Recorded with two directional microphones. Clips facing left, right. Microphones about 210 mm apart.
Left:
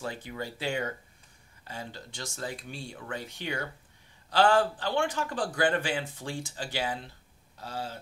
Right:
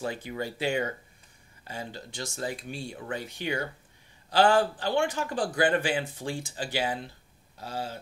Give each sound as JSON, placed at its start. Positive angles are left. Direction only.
{"t": 0.0, "sound": "speech", "side_deg": -15}